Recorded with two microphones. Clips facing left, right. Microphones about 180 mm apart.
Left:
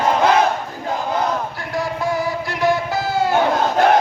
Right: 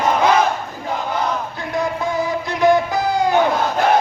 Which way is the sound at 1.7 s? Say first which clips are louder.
Right 1 dB; 20° right (ahead or behind).